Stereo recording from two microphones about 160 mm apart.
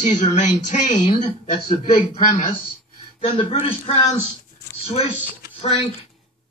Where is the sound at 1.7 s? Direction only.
30° left (ahead or behind).